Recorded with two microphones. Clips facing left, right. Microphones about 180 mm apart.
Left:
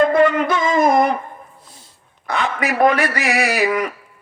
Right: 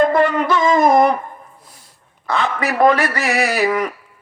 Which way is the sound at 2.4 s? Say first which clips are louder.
Right 1 dB; 45° right (ahead or behind).